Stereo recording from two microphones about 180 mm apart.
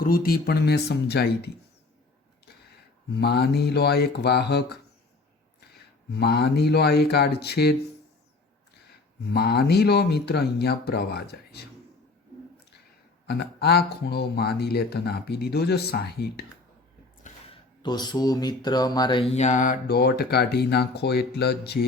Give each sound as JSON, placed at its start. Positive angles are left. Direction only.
{"t": 0.0, "sound": "speech", "side_deg": 55}
{"t": 3.1, "sound": "speech", "side_deg": 65}
{"t": 6.1, "sound": "speech", "side_deg": 65}
{"t": 9.2, "sound": "speech", "side_deg": 65}
{"t": 13.2, "sound": "speech", "side_deg": 65}
{"t": 17.3, "sound": "a sound", "side_deg": 45}
{"t": 17.8, "sound": "mantra", "side_deg": 25}
{"t": 19.9, "sound": "speech", "side_deg": 60}